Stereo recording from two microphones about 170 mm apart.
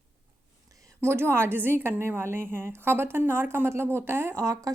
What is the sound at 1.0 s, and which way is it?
A woman's voice, 15° right (ahead or behind).